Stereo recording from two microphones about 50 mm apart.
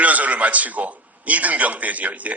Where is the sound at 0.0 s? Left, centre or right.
Right.